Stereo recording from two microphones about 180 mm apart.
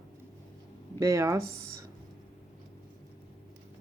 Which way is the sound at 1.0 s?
15° right (ahead or behind).